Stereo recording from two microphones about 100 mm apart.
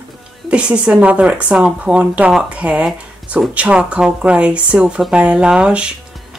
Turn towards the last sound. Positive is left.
turn(degrees=-10)  # may be behind; listen again after turning